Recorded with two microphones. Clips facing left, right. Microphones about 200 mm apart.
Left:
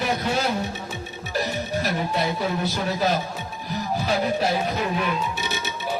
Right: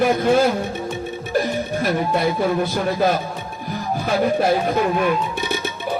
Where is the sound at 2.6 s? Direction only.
50° right (ahead or behind).